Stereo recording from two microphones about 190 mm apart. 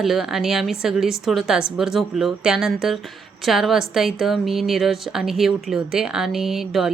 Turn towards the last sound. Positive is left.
turn(degrees=0)  # may be behind; listen again after turning